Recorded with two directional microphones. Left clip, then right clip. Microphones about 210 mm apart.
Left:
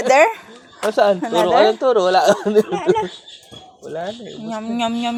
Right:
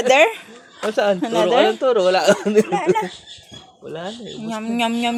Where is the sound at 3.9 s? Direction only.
15° right (ahead or behind).